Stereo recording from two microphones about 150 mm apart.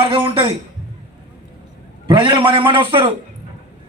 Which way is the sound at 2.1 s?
30° right (ahead or behind).